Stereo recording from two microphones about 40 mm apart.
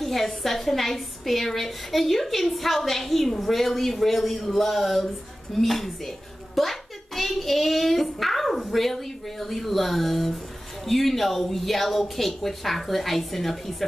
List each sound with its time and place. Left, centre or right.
0.0 s a woman's voice: centre